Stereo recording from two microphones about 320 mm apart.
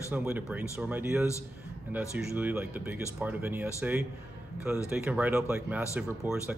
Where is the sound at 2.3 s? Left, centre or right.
Centre.